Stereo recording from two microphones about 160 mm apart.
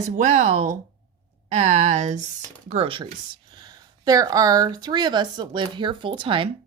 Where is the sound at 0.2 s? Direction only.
45° right (ahead or behind).